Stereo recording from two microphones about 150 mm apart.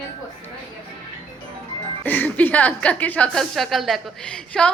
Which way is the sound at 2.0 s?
10° left (ahead or behind).